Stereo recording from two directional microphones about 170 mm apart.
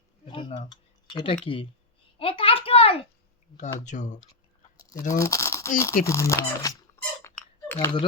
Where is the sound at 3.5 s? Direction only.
45° left (ahead or behind).